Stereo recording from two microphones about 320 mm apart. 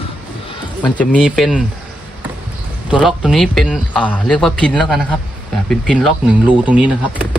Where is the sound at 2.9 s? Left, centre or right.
Centre.